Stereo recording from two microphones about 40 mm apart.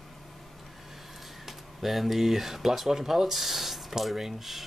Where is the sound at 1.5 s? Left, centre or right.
Centre.